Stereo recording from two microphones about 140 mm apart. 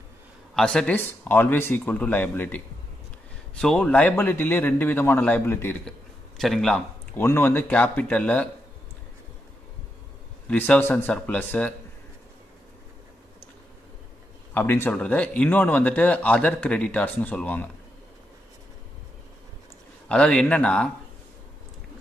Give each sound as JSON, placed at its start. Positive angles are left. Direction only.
{"t": 0.6, "sound": "speech", "side_deg": 5}
{"t": 5.9, "sound": "a sound", "side_deg": 5}
{"t": 7.2, "sound": "speech", "side_deg": 15}
{"t": 10.5, "sound": "speech", "side_deg": 10}
{"t": 14.5, "sound": "speech", "side_deg": 15}
{"t": 20.1, "sound": "speech", "side_deg": 5}